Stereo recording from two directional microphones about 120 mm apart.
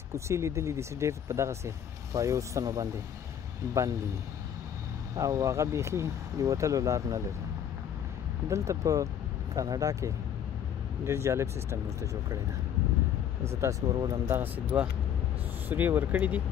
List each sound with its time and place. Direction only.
0.1 s speech: 25° right (ahead or behind)
5.1 s speech: 30° right (ahead or behind)
8.5 s speech: 25° right (ahead or behind)
13.5 s speech: 25° right (ahead or behind)
13.9 s speech: 35° right (ahead or behind)
14.2 s speech: 20° right (ahead or behind)